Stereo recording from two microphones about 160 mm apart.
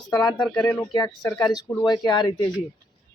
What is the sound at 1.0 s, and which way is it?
Speech, 20° left (ahead or behind).